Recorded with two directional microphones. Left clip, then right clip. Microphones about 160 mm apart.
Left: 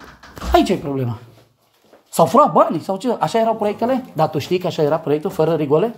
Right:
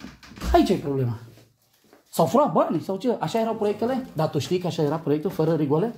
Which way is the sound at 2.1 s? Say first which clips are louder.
Left 7 dB; 10° left (ahead or behind).